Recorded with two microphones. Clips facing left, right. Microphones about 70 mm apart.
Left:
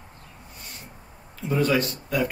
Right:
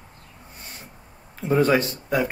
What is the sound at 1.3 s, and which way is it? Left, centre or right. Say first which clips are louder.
Speech: right 4 dB; right.